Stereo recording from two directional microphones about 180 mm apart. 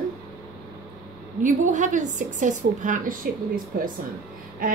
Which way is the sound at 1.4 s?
45° right (ahead or behind).